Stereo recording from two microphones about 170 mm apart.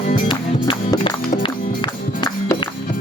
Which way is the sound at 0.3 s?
30° left (ahead or behind).